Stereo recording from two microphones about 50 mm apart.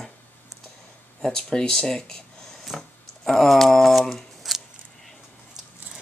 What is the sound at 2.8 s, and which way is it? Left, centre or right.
Speech, centre.